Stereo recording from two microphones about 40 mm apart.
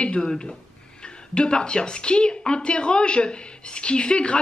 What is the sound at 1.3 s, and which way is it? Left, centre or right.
Speech, left.